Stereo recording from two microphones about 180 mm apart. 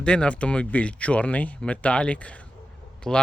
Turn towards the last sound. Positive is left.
turn(degrees=5)  # may be behind; listen again after turning